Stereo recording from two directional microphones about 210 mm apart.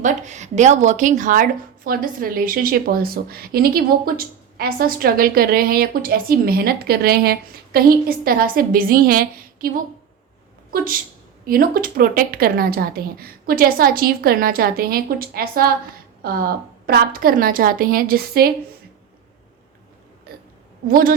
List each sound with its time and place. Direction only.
0.0 s speech: 35° right (ahead or behind)
11.4 s speech: 45° right (ahead or behind)
20.3 s burping: 45° right (ahead or behind)
20.8 s speech: 45° right (ahead or behind)